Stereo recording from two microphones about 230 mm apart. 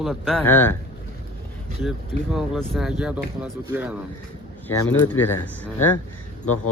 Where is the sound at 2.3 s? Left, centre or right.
Centre.